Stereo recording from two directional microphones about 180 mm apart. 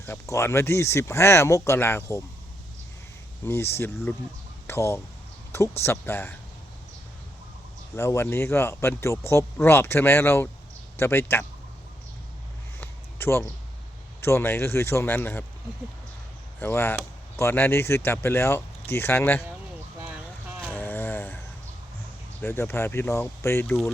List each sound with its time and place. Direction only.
0.0 s speech: 15° left (ahead or behind)
3.4 s speech: 15° left (ahead or behind)
7.9 s speech: 15° left (ahead or behind)
12.8 s a sound: 15° left (ahead or behind)
14.2 s speech: 15° left (ahead or behind)
16.6 s speech: 10° left (ahead or behind)
20.7 s a sound: 10° left (ahead or behind)
22.4 s speech: 10° left (ahead or behind)